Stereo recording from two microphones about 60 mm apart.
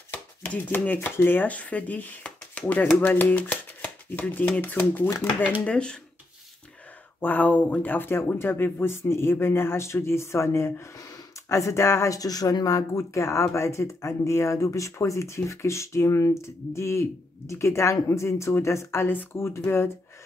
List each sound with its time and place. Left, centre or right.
0.1 s chopping: left
0.7 s speech: left
5.5 s speech: left
7.2 s speech: left
11.0 s a sound: left
12.1 s speech: left